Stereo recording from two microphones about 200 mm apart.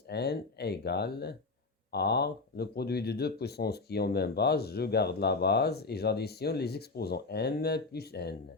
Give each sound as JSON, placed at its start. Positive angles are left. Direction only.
{"t": 0.1, "sound": "speech", "side_deg": 55}